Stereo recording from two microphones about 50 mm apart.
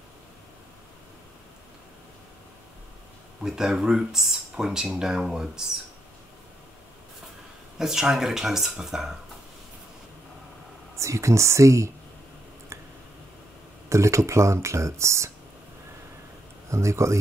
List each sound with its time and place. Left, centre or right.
3.4 s speech: centre
7.8 s speech: centre
11.0 s speech: right
13.8 s speech: right
16.7 s speech: right